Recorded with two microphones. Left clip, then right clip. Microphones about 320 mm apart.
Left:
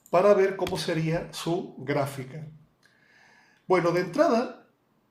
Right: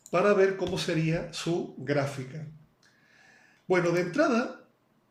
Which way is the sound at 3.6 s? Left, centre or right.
Centre.